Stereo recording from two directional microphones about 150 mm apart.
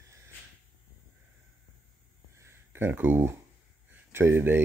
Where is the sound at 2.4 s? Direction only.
15° right (ahead or behind).